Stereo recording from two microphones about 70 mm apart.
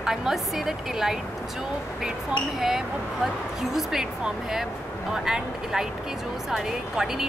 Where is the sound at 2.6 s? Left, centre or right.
Centre.